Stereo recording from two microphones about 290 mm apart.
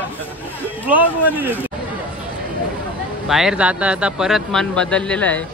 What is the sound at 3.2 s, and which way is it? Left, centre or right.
Speech, centre.